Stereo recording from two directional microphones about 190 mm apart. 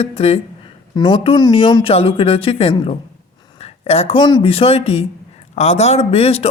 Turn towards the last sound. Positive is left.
turn(degrees=30)  # may be behind; listen again after turning